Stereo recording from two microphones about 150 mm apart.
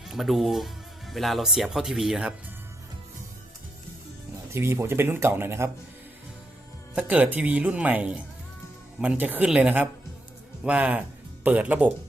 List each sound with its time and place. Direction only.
0.1 s speech: centre (ahead or behind)
4.5 s speech: 15° right (ahead or behind)
6.9 s speech: 10° right (ahead or behind)